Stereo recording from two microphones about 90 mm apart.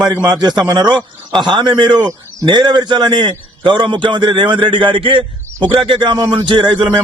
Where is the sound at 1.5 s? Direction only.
60° right (ahead or behind).